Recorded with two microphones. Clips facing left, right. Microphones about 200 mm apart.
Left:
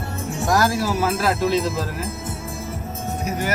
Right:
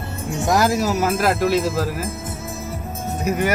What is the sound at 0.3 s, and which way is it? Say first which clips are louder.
Speech: right 2 dB; 20° right (ahead or behind).